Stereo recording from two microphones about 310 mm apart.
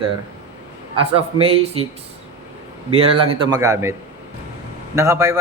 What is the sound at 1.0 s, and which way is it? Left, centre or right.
Speech, centre.